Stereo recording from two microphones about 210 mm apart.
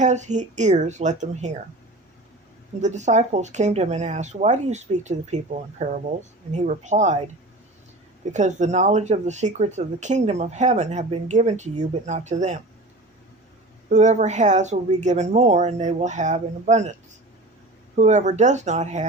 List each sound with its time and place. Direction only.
0.0 s speech: 35° right (ahead or behind)
2.8 s speech: 35° right (ahead or behind)
8.3 s speech: 35° right (ahead or behind)
13.9 s speech: 35° right (ahead or behind)
17.9 s speech: 35° right (ahead or behind)